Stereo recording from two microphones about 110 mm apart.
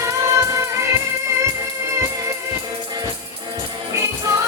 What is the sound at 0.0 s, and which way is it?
Music, 25° right (ahead or behind).